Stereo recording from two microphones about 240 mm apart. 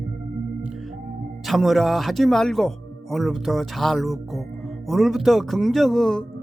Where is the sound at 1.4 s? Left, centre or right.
Centre.